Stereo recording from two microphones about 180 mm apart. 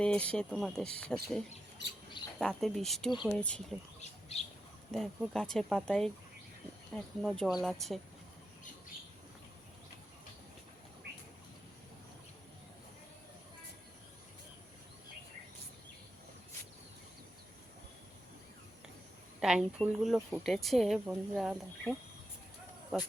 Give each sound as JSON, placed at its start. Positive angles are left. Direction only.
{"t": 0.0, "sound": "a woman's voice", "side_deg": 5}
{"t": 2.4, "sound": "a woman's voice", "side_deg": 0}
{"t": 4.0, "sound": "bird", "side_deg": 35}
{"t": 4.9, "sound": "a woman's voice", "side_deg": 0}
{"t": 19.4, "sound": "a woman's voice", "side_deg": -5}